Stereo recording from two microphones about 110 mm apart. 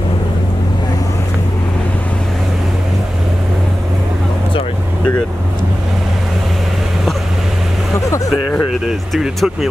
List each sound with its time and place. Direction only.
9.1 s speech: centre (ahead or behind)